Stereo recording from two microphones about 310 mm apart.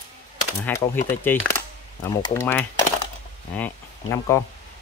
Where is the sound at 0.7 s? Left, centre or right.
Centre.